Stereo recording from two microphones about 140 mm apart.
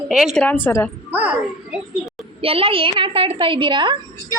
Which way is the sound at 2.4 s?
40° right (ahead or behind).